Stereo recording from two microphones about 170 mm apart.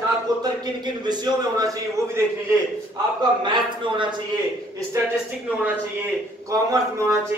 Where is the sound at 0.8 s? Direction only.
25° right (ahead or behind).